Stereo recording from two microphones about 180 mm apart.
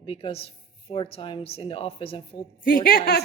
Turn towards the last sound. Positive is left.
turn(degrees=60)  # may be behind; listen again after turning